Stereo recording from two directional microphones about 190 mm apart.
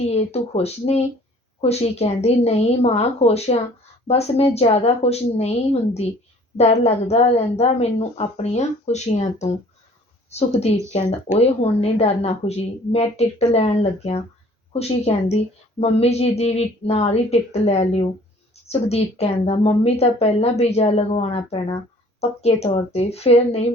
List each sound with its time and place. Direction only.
0.1 s a woman's voice: 35° left (ahead or behind)
10.9 s a woman's voice: 35° left (ahead or behind)